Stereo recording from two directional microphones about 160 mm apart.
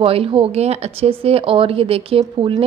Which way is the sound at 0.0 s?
35° right (ahead or behind).